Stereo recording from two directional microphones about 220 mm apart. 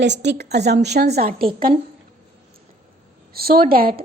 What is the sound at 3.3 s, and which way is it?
Speech, 45° right (ahead or behind).